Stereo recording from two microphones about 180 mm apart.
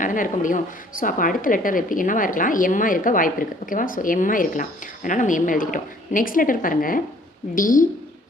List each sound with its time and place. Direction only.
0.0 s a woman's voice: 45° left (ahead or behind)